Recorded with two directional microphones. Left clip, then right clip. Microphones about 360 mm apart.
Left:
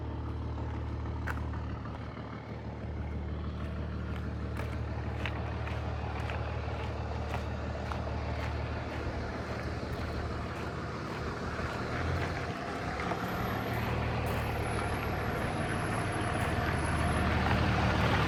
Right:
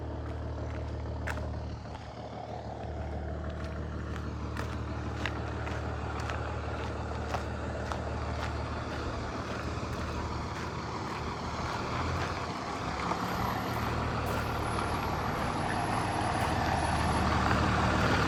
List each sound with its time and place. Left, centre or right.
13.1 s vehicle: right